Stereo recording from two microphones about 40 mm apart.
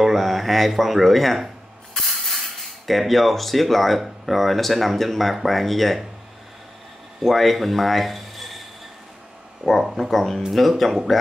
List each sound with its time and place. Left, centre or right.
0.0 s speech: centre
7.2 s speech: centre
9.6 s speech: right
10.1 s speech: centre